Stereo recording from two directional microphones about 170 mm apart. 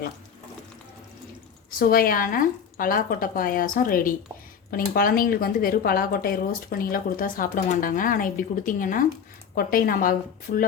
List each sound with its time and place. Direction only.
1.8 s speech: 60° left (ahead or behind)